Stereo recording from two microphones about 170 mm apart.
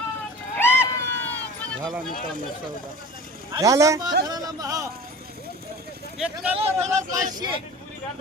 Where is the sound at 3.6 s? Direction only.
20° right (ahead or behind).